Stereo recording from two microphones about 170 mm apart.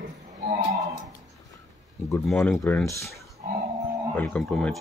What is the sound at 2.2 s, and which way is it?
Speech, 5° left (ahead or behind).